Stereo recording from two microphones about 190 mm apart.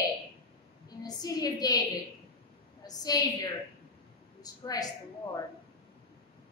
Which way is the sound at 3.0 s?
20° left (ahead or behind).